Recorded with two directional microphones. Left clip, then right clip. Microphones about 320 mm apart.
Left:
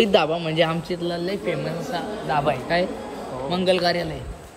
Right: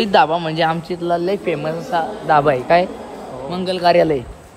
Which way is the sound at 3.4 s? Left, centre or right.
Centre.